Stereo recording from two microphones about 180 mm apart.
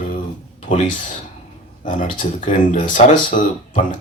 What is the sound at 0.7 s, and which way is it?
Speech, 45° left (ahead or behind).